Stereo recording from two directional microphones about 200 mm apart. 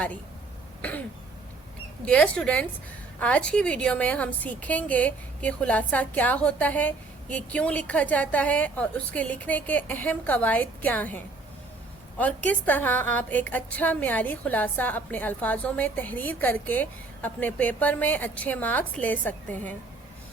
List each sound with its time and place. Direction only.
0.8 s throat clearing: 10° left (ahead or behind)
2.0 s a woman's voice: 5° left (ahead or behind)